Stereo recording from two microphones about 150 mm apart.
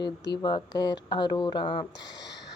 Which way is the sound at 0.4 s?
30° left (ahead or behind).